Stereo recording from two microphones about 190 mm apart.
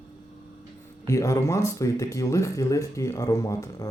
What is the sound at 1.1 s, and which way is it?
Speech, 15° left (ahead or behind).